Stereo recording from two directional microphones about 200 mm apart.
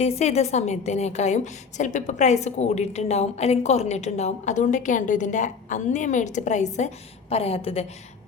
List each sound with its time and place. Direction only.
0.0 s a woman's voice: 30° left (ahead or behind)